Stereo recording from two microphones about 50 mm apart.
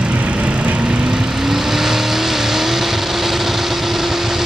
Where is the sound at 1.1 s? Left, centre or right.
Centre.